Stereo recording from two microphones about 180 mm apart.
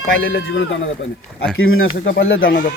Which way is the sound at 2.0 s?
90° left.